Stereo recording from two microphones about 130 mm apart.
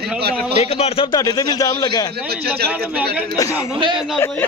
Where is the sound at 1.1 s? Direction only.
30° left (ahead or behind).